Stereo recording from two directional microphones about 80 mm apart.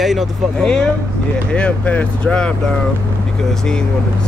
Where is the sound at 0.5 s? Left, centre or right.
Centre.